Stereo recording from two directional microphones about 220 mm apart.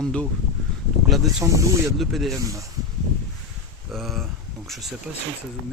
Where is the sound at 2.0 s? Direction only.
Centre (ahead or behind).